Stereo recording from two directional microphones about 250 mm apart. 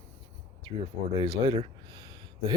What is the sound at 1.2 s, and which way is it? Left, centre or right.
Speech, centre.